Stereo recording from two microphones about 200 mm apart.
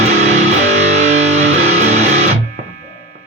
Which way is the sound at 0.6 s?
35° right (ahead or behind).